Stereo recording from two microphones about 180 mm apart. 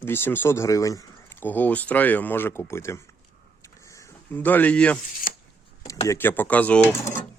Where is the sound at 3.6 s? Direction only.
15° left (ahead or behind).